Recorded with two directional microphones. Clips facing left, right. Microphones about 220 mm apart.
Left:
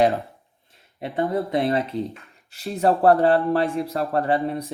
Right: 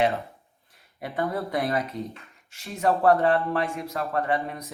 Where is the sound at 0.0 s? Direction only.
30° left (ahead or behind).